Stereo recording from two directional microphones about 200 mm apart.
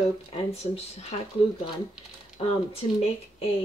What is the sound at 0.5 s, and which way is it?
Speech, 30° left (ahead or behind).